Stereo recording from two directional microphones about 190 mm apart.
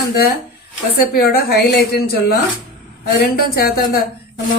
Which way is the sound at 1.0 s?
55° left (ahead or behind).